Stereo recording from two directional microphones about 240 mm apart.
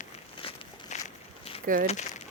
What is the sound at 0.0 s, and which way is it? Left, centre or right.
Walk, left.